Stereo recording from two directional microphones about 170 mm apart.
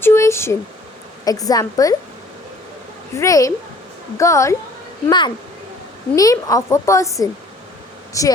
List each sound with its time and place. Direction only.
0.0 s a sound: 15° left (ahead or behind)
1.2 s a woman's voice: 20° left (ahead or behind)
3.2 s a woman's voice: 20° left (ahead or behind)